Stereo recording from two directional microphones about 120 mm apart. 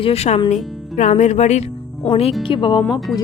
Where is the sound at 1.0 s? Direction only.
80° left.